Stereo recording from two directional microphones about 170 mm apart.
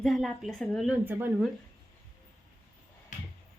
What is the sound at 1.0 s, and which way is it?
Speech, 10° right (ahead or behind).